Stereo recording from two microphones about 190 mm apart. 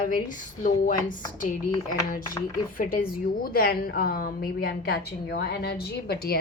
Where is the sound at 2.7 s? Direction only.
45° left (ahead or behind).